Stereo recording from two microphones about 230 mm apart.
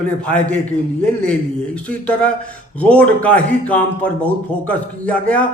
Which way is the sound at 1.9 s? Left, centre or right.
Centre.